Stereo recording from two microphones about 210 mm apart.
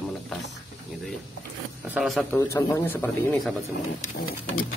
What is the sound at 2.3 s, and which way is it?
Speech, 15° left (ahead or behind).